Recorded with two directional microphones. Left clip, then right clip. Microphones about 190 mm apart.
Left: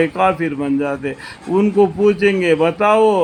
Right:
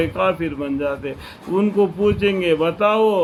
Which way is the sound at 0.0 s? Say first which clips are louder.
Left 4 dB; 45° left (ahead or behind).